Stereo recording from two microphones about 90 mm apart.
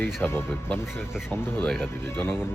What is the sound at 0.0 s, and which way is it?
Speech, 20° left (ahead or behind).